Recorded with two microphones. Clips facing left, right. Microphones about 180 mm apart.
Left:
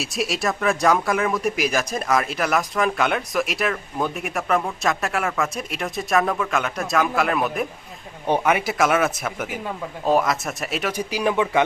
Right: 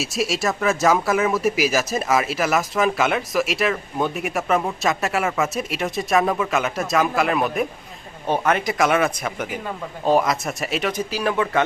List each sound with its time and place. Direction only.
0.0 s speech: centre (ahead or behind)
11.1 s speech: 15° left (ahead or behind)